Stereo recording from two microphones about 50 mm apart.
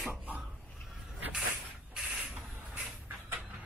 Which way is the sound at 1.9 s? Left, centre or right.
Centre.